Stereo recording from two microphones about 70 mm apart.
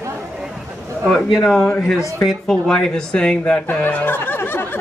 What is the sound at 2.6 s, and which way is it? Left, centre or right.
Speech, centre.